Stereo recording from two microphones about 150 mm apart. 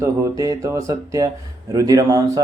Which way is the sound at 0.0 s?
20° right (ahead or behind).